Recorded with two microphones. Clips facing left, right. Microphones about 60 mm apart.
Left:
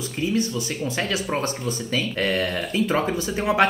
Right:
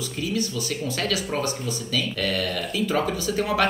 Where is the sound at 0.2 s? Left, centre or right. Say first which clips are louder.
Left 4 dB; left.